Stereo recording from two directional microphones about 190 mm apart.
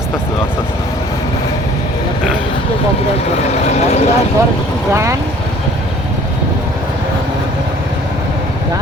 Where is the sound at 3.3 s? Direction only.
35° left (ahead or behind).